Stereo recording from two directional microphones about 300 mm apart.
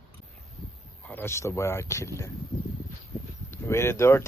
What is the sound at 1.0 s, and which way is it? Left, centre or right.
Speech, centre.